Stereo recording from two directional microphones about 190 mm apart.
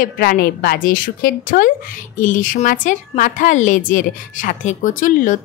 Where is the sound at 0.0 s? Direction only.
50° left (ahead or behind).